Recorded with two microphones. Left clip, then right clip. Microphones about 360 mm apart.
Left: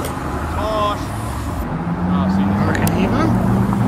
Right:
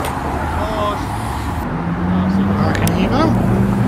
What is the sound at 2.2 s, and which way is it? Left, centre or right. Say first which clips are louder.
Vehicle: right 1 dB; centre.